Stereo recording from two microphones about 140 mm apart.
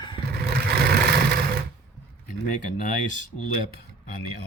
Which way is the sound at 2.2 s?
65° left (ahead or behind).